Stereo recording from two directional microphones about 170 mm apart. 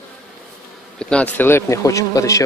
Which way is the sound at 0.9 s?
5° left (ahead or behind).